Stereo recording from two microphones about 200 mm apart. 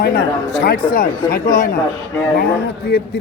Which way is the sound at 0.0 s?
50° left (ahead or behind).